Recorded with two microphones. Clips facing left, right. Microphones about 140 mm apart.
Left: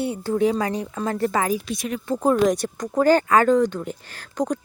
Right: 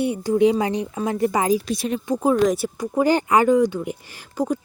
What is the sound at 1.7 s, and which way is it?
Speech, 30° right (ahead or behind).